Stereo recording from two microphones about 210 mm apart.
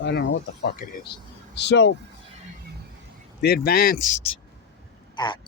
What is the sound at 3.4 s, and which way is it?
Speech, 50° left (ahead or behind).